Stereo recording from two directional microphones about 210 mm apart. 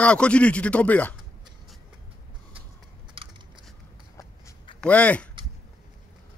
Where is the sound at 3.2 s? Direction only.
25° right (ahead or behind).